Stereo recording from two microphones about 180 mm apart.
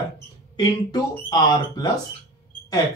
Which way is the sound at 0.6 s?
25° left (ahead or behind).